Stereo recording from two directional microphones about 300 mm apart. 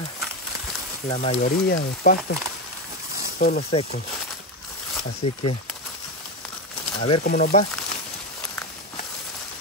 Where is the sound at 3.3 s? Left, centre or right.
Left.